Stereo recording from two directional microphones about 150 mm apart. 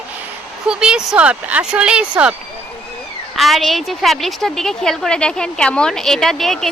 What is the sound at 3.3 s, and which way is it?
A woman's voice, centre (ahead or behind).